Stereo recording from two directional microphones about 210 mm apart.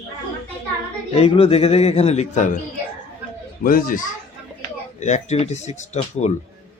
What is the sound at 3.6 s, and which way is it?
Speech, 40° left (ahead or behind).